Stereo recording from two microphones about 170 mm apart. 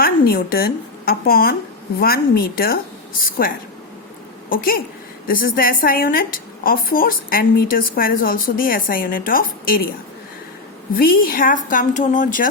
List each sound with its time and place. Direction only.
0.0 s a woman's voice: 60° left (ahead or behind)
10.9 s speech: 60° left (ahead or behind)